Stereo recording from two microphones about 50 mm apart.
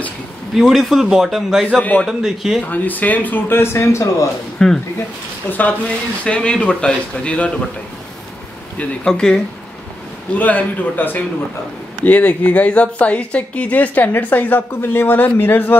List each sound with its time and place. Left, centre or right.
0.6 s a man's voice: centre
1.8 s speech: left
2.0 s a man's voice: centre
2.6 s speech: left
4.6 s speech: centre
5.5 s speech: left
6.2 s speech: centre
9.0 s speech: centre
10.3 s speech: left